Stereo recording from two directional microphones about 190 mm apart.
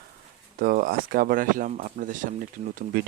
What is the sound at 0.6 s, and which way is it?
Speech, 50° right (ahead or behind).